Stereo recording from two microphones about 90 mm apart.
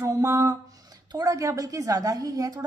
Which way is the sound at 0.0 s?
35° right (ahead or behind).